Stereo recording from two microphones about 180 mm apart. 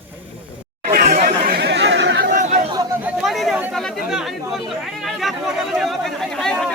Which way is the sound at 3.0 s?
Centre (ahead or behind).